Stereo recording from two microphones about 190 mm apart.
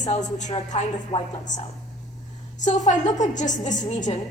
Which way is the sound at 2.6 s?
40° left (ahead or behind).